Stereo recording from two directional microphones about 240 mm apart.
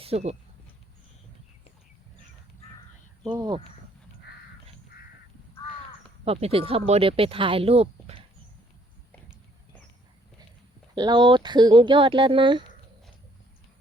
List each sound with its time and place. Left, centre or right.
0.0 s speech: right
3.2 s speech: centre
4.3 s crow: left
6.2 s speech: right
10.9 s speech: centre